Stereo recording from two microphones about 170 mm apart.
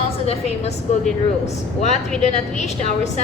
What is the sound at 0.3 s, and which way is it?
A woman's voice, 40° left (ahead or behind).